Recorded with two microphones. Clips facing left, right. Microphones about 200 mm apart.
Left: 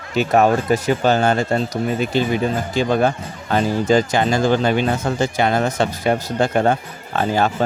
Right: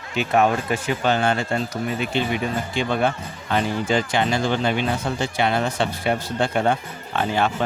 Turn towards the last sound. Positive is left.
turn(degrees=40)  # may be behind; listen again after turning